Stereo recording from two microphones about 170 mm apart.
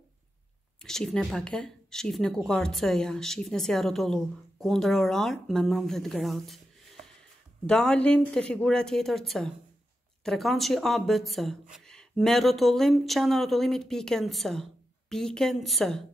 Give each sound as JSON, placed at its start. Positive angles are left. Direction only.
{"t": 0.8, "sound": "speech", "side_deg": 5}